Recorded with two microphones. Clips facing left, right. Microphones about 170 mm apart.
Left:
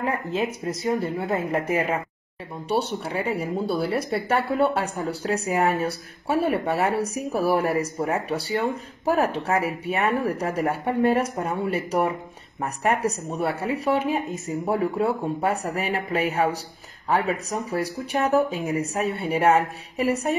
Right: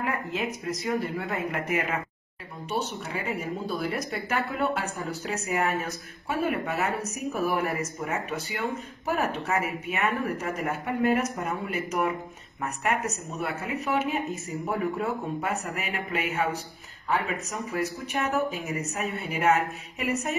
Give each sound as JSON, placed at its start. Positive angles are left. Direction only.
{"t": 0.0, "sound": "speech", "side_deg": 30}